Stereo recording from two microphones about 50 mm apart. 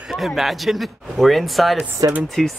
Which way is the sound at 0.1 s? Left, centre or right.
Centre.